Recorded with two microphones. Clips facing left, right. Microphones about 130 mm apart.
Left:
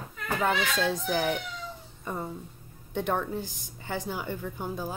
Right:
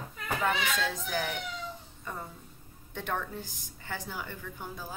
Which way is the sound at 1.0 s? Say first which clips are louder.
Left 5 dB; 25° left (ahead or behind).